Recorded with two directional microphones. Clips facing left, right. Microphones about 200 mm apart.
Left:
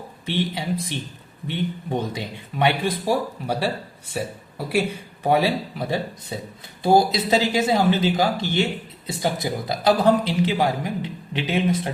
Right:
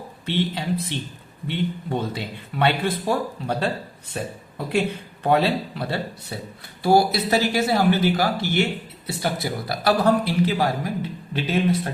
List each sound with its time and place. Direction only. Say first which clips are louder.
0.3 s a man's voice: right 1 dB; 15° left (ahead or behind)